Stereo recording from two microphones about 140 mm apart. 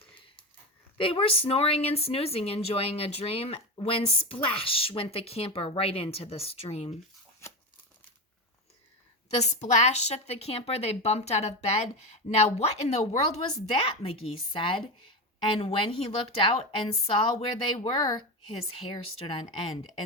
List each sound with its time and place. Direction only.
0.9 s a woman's voice: 40° left (ahead or behind)
7.4 s crumpling: 20° left (ahead or behind)
9.3 s a woman's voice: 55° left (ahead or behind)
18.7 s a woman's voice: 40° left (ahead or behind)